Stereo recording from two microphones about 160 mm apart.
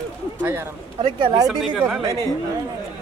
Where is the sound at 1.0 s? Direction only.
30° right (ahead or behind).